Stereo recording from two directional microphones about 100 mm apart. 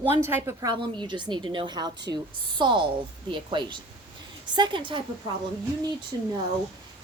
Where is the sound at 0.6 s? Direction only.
50° right (ahead or behind).